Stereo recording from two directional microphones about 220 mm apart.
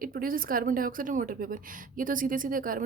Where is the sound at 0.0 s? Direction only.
40° right (ahead or behind).